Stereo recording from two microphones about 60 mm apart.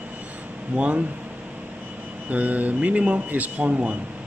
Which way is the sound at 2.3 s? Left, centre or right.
Right.